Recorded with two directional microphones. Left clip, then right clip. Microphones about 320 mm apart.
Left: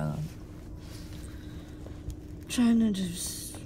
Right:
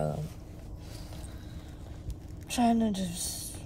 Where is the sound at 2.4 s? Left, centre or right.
Centre.